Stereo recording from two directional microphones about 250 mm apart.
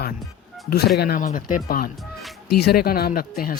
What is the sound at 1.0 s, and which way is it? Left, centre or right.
Speech, left.